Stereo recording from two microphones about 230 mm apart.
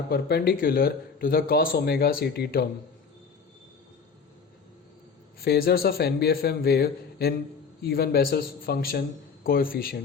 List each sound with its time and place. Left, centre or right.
0.1 s speech: left
5.5 s a man's voice: left